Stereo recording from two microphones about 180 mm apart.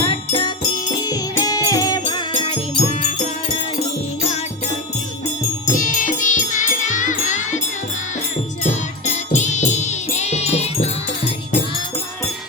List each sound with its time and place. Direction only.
0.0 s music: 30° left (ahead or behind)
4.3 s music: 40° left (ahead or behind)
5.7 s music: 45° left (ahead or behind)
8.6 s music: 40° left (ahead or behind)